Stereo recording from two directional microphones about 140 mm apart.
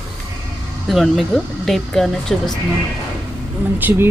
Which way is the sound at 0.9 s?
Centre (ahead or behind).